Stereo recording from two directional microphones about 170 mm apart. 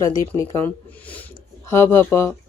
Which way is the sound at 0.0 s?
20° left (ahead or behind).